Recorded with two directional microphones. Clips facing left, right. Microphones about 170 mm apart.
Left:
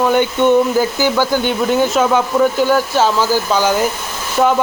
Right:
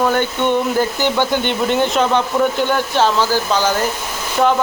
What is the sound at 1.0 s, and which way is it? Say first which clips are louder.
Speech: left 2 dB; 5° left (ahead or behind).